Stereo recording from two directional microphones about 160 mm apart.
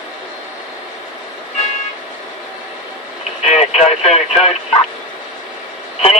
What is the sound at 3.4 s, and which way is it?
Radio, 40° left (ahead or behind).